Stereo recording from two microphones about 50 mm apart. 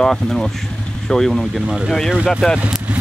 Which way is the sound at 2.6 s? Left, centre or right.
Right.